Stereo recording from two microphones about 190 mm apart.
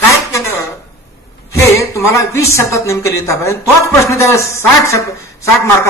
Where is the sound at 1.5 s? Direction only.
15° left (ahead or behind).